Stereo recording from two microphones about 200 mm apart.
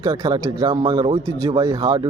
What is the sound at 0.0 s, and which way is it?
Speech, 25° right (ahead or behind).